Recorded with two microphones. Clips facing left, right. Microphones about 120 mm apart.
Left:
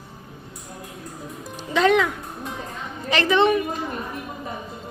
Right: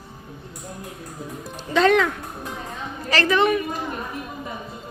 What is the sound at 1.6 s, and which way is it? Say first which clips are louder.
A woman's voice: right 1 dB; 15° left (ahead or behind).